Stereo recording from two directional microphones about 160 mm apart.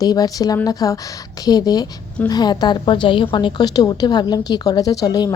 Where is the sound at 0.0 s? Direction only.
25° left (ahead or behind).